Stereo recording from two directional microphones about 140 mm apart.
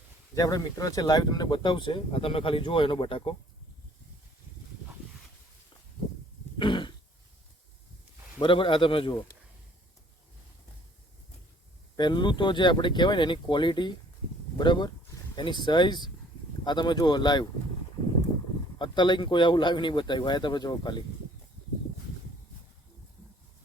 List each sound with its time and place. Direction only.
0.3 s speech: 25° left (ahead or behind)
6.6 s throat clearing: 35° left (ahead or behind)
8.4 s speech: 35° left (ahead or behind)
11.9 s speech: 35° left (ahead or behind)
18.8 s speech: 35° left (ahead or behind)